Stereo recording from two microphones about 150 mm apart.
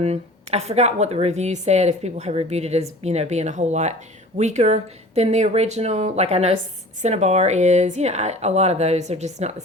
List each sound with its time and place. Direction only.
0.0 s a woman's voice: 45° right (ahead or behind)